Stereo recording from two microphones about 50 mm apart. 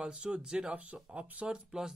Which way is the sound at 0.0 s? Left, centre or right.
Right.